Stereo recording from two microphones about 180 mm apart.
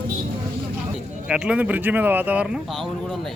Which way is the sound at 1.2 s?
5° right (ahead or behind).